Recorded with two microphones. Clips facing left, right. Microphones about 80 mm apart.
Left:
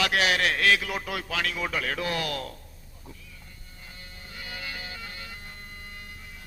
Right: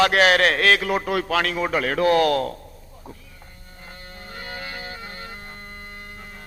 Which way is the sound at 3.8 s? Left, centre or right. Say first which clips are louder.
Right 7 dB; right.